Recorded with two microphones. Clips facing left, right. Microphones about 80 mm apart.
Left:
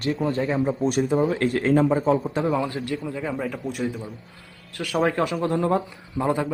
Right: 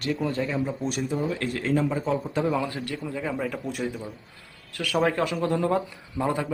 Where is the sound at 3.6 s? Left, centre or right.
Centre.